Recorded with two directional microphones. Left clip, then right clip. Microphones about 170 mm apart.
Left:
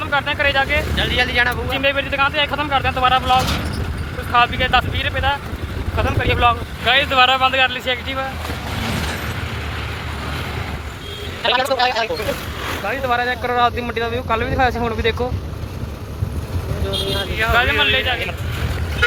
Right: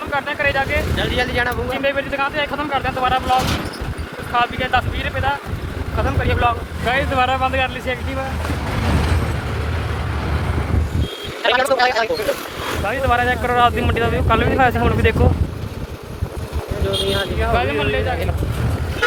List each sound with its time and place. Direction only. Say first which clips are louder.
0.1 s speech: left 1 dB; 5° left (ahead or behind)
0.9 s a woman's voice: left 4 dB; 25° right (ahead or behind)
1.7 s speech: left 1 dB; 5° left (ahead or behind)
11.4 s a woman's voice: right 1 dB; 15° right (ahead or behind)
12.8 s speech: right 2 dB; 10° left (ahead or behind)
17.5 s speech: left 4 dB; 5° left (ahead or behind)